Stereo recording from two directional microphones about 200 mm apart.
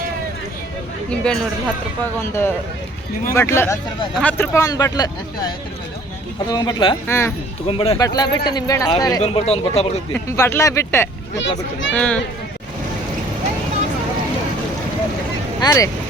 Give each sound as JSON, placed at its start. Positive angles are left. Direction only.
{"t": 1.1, "sound": "speech", "side_deg": 5}
{"t": 6.5, "sound": "speech", "side_deg": 20}
{"t": 7.7, "sound": "speech", "side_deg": 25}
{"t": 9.2, "sound": "speech", "side_deg": 30}
{"t": 10.2, "sound": "speech", "side_deg": 15}
{"t": 11.3, "sound": "a child's voice", "side_deg": 65}
{"t": 11.9, "sound": "speech", "side_deg": 5}
{"t": 15.6, "sound": "speech", "side_deg": 15}